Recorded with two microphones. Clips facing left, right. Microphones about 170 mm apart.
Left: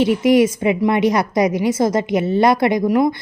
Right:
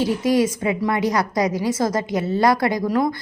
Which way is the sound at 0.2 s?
20° left (ahead or behind).